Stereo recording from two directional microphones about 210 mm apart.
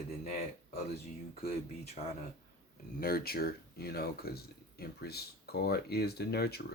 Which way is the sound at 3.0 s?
45° left (ahead or behind).